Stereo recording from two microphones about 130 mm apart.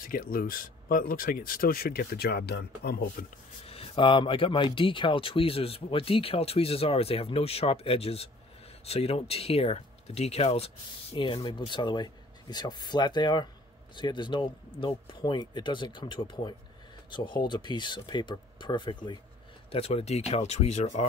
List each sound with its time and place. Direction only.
0.0 s speech: 90° left
3.2 s speech: 90° left
3.6 s speech: 45° left (ahead or behind)
19.7 s speech: 50° left (ahead or behind)